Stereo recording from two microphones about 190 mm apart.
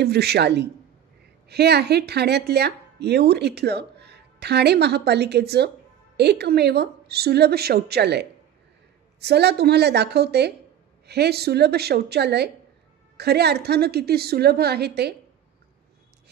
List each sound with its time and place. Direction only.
0.0 s speech: 60° right (ahead or behind)